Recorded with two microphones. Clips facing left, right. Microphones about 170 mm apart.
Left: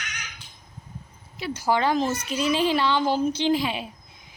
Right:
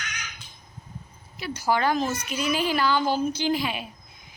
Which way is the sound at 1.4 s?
25° left (ahead or behind).